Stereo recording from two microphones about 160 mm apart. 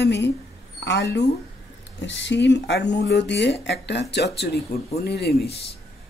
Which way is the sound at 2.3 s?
90° left.